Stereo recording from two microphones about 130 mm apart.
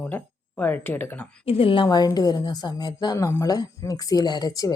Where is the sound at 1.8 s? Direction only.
30° left (ahead or behind).